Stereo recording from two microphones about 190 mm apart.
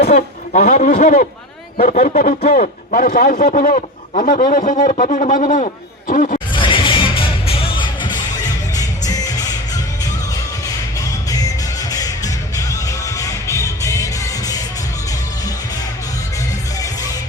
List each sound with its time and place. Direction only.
0.0 s speech: 45° left (ahead or behind)
6.5 s music: 25° left (ahead or behind)